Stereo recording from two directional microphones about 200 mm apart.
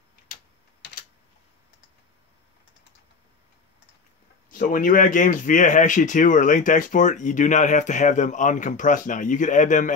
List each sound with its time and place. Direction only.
4.5 s speech: 45° left (ahead or behind)